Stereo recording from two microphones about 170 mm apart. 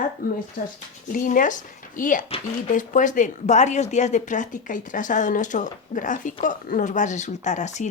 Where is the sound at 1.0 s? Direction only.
50° left (ahead or behind).